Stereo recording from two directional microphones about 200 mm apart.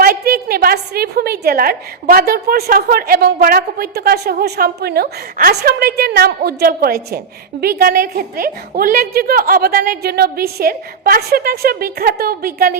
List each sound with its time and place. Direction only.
0.0 s a woman's voice: 50° right (ahead or behind)